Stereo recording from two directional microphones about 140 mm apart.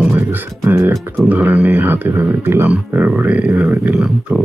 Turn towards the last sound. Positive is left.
turn(degrees=-10)  # may be behind; listen again after turning